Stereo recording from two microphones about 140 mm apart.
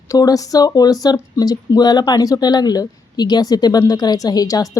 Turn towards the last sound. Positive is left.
turn(degrees=25)  # may be behind; listen again after turning